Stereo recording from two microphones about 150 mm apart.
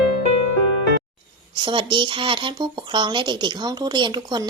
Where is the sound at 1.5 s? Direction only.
35° right (ahead or behind).